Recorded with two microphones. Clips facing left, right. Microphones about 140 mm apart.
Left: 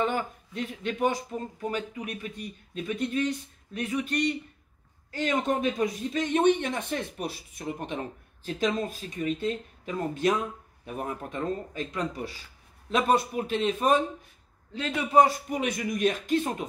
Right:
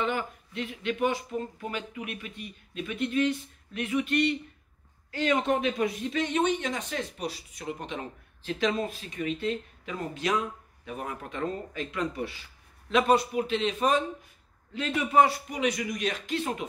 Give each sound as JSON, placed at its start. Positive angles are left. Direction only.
{"t": 0.0, "sound": "speech", "side_deg": 40}
{"t": 14.7, "sound": "speech", "side_deg": 35}